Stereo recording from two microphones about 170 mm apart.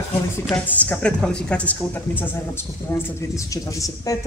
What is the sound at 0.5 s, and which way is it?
Speech, 5° left (ahead or behind).